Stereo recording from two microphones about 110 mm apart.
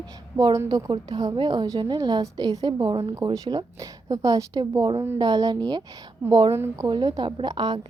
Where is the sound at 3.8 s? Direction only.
30° right (ahead or behind).